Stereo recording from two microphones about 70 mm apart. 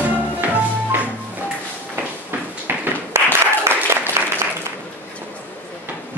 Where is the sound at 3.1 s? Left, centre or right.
Right.